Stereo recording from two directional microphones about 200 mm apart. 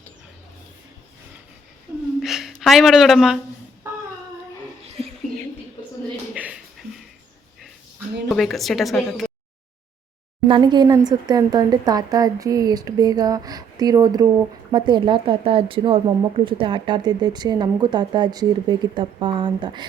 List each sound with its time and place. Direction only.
2.2 s speech: centre (ahead or behind)
6.3 s a sound: 5° right (ahead or behind)
8.3 s a woman's voice: centre (ahead or behind)
10.5 s speech: 20° right (ahead or behind)